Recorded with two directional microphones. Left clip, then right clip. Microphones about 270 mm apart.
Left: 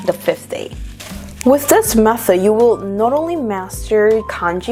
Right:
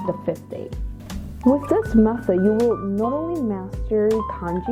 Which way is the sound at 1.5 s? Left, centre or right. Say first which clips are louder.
Left 9 dB; centre.